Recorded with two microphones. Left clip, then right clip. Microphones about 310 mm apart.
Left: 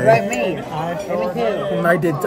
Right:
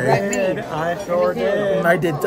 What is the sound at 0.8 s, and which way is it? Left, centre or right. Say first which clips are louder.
Speech: right 4 dB; right.